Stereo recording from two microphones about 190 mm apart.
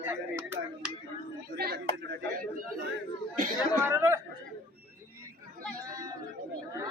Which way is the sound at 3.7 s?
10° right (ahead or behind).